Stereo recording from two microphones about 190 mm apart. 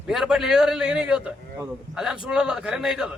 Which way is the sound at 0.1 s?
Centre (ahead or behind).